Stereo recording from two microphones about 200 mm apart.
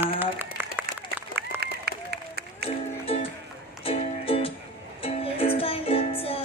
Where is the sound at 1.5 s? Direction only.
50° right (ahead or behind).